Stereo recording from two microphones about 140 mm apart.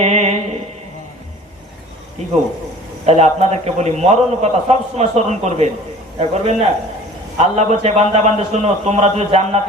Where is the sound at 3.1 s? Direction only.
50° right (ahead or behind).